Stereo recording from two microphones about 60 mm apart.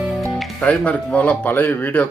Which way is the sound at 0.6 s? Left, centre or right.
Left.